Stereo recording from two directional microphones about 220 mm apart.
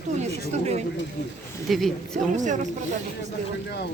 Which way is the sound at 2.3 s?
35° right (ahead or behind).